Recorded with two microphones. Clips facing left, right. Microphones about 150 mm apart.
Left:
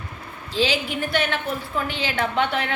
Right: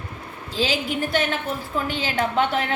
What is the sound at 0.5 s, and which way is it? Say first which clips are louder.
A woman's voice: left 1 dB; 45° right (ahead or behind).